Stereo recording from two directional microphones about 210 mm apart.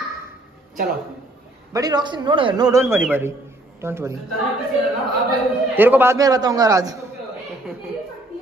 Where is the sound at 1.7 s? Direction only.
20° right (ahead or behind).